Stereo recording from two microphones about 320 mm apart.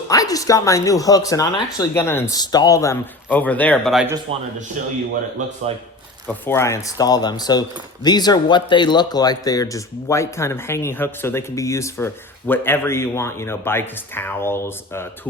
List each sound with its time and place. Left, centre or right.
0.1 s speech: centre
5.7 s speech: centre
6.2 s speech: centre